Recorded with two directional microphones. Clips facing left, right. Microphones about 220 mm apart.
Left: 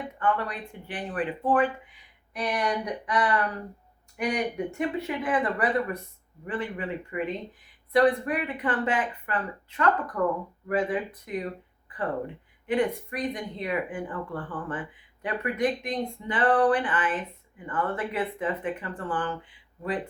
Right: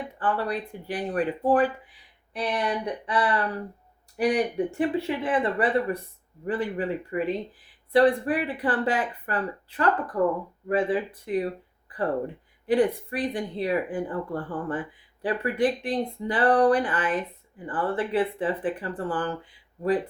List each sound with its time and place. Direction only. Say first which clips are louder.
0.2 s speech: right 1 dB; 35° right (ahead or behind)